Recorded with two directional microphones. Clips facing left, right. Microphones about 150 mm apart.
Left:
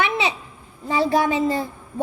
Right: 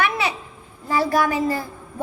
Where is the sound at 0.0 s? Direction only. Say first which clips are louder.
Even; 20° left (ahead or behind).